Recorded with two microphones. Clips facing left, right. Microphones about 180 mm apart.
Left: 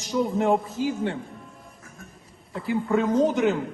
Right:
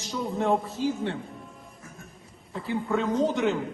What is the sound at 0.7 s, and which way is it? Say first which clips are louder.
Speech: left 2 dB; 15° left (ahead or behind).